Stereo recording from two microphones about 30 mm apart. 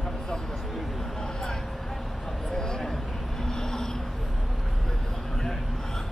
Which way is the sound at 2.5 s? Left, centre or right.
Left.